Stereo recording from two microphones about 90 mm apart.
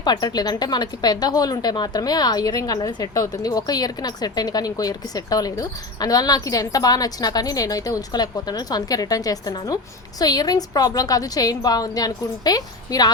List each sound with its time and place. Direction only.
0.0 s a woman's voice: 55° left (ahead or behind)